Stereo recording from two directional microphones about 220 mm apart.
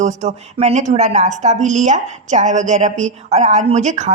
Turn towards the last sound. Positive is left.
turn(degrees=-35)  # may be behind; listen again after turning